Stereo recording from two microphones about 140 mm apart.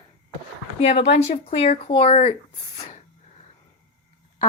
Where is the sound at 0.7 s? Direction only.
50° left (ahead or behind).